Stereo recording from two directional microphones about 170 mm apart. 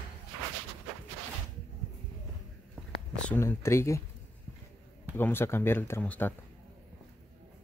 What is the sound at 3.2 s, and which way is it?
Speech, 10° left (ahead or behind).